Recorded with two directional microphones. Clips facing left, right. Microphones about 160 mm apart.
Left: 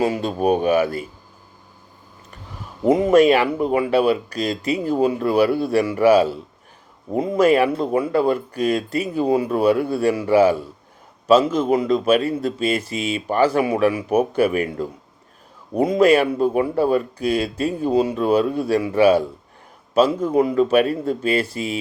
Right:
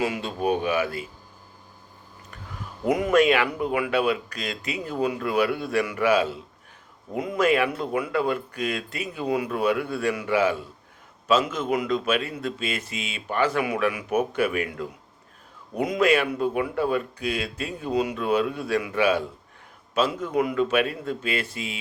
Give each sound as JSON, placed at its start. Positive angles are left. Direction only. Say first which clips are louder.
{"t": 0.0, "sound": "speech", "louder": "left 6 dB", "side_deg": 35}
{"t": 2.9, "sound": "speech", "louder": "left 6 dB", "side_deg": 30}